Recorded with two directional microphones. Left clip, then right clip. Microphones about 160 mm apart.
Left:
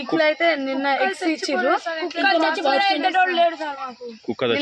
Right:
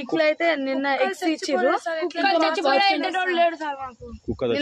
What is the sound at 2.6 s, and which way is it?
A woman's voice, centre (ahead or behind).